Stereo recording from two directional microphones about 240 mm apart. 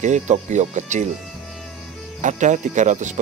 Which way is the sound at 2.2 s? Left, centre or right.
Right.